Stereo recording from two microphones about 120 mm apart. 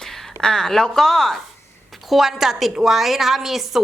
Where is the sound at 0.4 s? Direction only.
5° left (ahead or behind).